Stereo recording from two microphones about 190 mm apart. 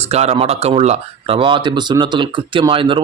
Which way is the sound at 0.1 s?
35° right (ahead or behind).